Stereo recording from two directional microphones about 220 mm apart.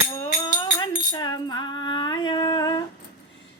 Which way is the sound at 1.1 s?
20° left (ahead or behind).